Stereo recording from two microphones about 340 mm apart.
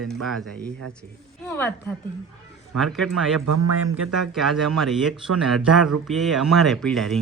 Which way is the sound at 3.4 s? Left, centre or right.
Right.